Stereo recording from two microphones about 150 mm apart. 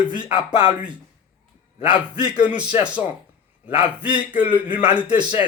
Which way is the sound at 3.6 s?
10° right (ahead or behind).